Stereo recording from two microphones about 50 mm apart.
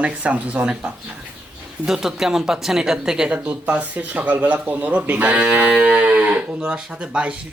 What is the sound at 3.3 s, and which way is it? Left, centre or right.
Speech, right.